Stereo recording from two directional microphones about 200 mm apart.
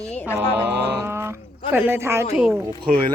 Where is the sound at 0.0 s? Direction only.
10° left (ahead or behind).